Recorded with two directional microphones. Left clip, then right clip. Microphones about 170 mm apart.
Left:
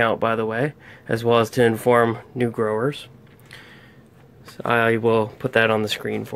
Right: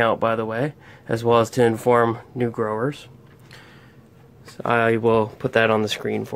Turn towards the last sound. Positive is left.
turn(degrees=-5)  # may be behind; listen again after turning